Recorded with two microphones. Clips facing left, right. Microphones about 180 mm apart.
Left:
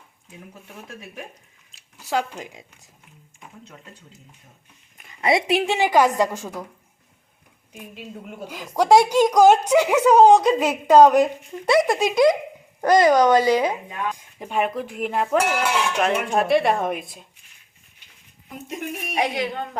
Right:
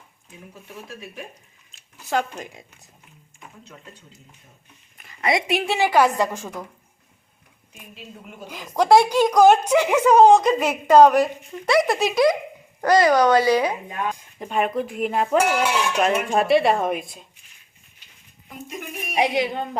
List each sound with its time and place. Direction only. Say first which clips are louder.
1.7 s a sound: even; 10° left (ahead or behind)
2.4 s a woman's voice: even; 15° left (ahead or behind)
4.9 s speech: left 2 dB; 25° left (ahead or behind)
5.7 s a woman's voice: right 1 dB; 15° left (ahead or behind)
8.4 s a woman's voice: even; 10° left (ahead or behind)
14.3 s a sound: right 1 dB; 10° left (ahead or behind)
19.1 s a woman's voice: right 3 dB; 5° right (ahead or behind)